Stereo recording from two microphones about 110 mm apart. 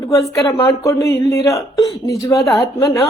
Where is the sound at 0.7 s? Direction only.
30° left (ahead or behind).